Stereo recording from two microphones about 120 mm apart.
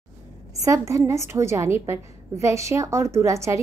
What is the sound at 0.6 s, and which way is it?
A woman's voice, 25° right (ahead or behind).